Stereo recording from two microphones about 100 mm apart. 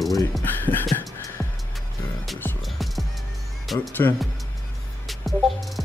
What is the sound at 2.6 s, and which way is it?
Music, centre (ahead or behind).